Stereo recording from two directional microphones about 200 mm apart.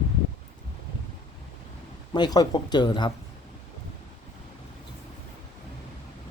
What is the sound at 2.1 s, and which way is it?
Speech, 20° left (ahead or behind).